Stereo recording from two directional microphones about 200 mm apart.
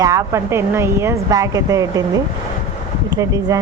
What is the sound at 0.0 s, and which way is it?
Speech, 15° right (ahead or behind).